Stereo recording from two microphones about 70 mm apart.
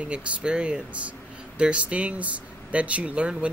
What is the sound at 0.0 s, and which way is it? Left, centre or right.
Speech, centre.